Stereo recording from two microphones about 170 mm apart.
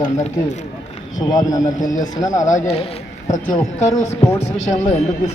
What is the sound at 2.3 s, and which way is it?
Speech, 45° left (ahead or behind).